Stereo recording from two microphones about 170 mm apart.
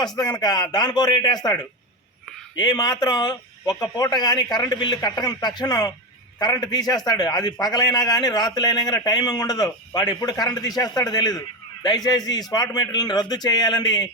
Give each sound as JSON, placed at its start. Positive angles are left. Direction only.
{"t": 0.2, "sound": "a man's voice", "side_deg": 25}
{"t": 2.6, "sound": "a man's voice", "side_deg": 25}